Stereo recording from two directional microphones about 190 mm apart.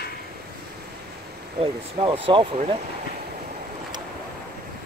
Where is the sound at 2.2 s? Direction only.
25° right (ahead or behind).